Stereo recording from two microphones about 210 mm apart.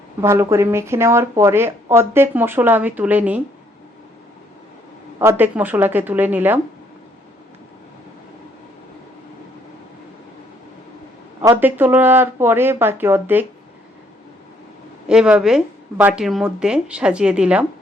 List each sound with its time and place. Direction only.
0.2 s speech: 10° right (ahead or behind)
5.2 s speech: 10° right (ahead or behind)
11.4 s speech: 10° right (ahead or behind)
15.0 s a woman's voice: 5° right (ahead or behind)